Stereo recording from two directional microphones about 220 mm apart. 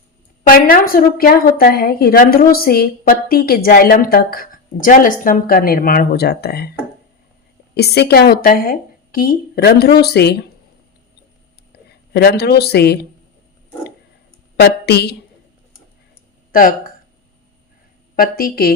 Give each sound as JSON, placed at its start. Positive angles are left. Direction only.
{"t": 0.4, "sound": "a woman's voice", "side_deg": 40}
{"t": 7.8, "sound": "speech", "side_deg": 45}
{"t": 11.7, "sound": "a sound", "side_deg": 45}
{"t": 12.1, "sound": "speech", "side_deg": 45}
{"t": 14.6, "sound": "speech", "side_deg": 50}
{"t": 16.5, "sound": "speech", "side_deg": 40}
{"t": 18.2, "sound": "a woman's voice", "side_deg": 40}